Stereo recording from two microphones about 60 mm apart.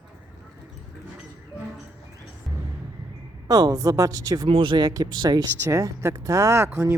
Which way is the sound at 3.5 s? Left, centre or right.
Right.